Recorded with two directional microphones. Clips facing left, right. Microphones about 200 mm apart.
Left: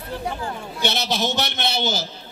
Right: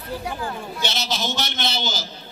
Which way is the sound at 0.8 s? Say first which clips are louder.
Left 5 dB; 60° left (ahead or behind).